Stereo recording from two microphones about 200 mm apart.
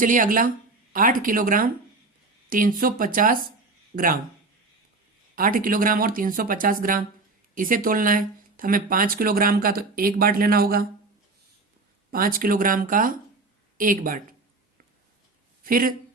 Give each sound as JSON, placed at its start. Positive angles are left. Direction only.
{"t": 0.0, "sound": "speech", "side_deg": -40}
{"t": 5.3, "sound": "speech", "side_deg": -45}
{"t": 12.1, "sound": "speech", "side_deg": -45}
{"t": 15.6, "sound": "speech", "side_deg": -45}